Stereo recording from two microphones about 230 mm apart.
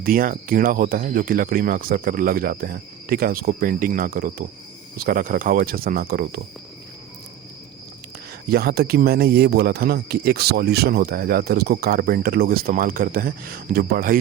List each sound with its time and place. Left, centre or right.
0.0 s speech: right
8.4 s speech: right